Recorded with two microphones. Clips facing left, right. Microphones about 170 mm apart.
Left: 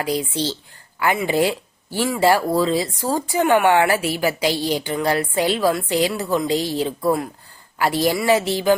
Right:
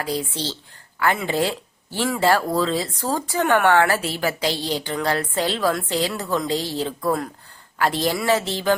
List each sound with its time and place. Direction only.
0.0 s speech: 15° left (ahead or behind)